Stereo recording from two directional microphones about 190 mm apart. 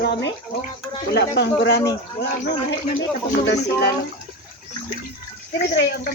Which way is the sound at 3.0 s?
65° left (ahead or behind).